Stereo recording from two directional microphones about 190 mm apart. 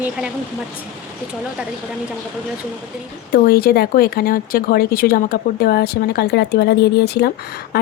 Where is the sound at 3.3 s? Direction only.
55° left (ahead or behind).